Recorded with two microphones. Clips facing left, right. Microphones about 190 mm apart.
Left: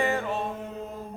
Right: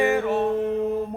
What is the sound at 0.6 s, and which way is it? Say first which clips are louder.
Mantra: right 13 dB; 70° right (ahead or behind).